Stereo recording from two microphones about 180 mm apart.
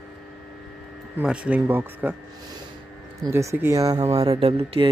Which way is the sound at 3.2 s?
15° right (ahead or behind).